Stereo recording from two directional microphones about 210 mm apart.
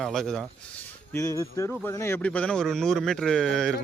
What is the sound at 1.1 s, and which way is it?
Speech, 15° left (ahead or behind).